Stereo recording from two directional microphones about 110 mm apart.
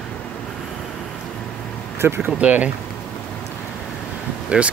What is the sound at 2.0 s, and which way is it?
Speech, 20° right (ahead or behind).